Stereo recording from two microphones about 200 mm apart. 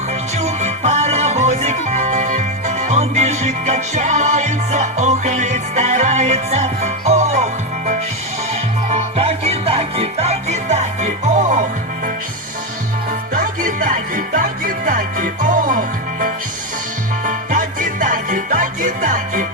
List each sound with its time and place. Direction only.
0.4 s music: 35° right (ahead or behind)
13.3 s music: 40° right (ahead or behind)